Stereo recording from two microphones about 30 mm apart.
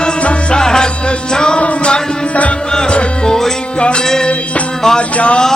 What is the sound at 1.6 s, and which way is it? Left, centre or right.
Music, left.